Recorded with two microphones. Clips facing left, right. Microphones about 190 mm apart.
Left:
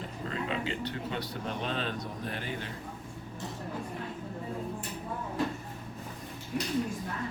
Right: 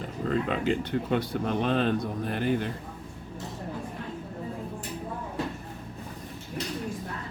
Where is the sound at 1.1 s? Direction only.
55° right (ahead or behind).